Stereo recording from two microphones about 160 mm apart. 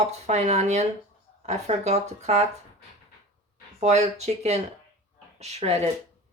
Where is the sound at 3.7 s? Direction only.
45° right (ahead or behind).